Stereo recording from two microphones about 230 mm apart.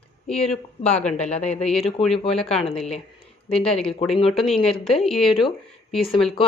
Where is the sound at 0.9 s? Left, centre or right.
Centre.